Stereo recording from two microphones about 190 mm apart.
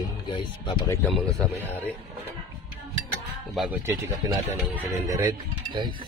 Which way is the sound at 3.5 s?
10° right (ahead or behind).